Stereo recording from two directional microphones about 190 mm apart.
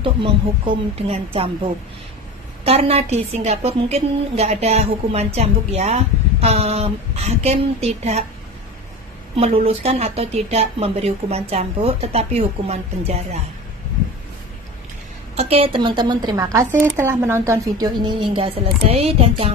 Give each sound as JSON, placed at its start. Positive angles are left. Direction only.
{"t": 0.0, "sound": "a woman's voice", "side_deg": -25}
{"t": 9.3, "sound": "a woman's voice", "side_deg": -30}
{"t": 15.3, "sound": "speech", "side_deg": -30}